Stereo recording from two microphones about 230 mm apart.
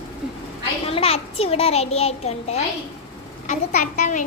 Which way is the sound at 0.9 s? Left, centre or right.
Left.